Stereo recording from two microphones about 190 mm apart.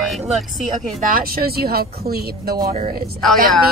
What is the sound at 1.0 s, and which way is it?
Speech, 50° right (ahead or behind).